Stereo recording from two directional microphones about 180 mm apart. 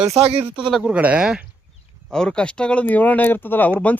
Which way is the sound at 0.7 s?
5° right (ahead or behind).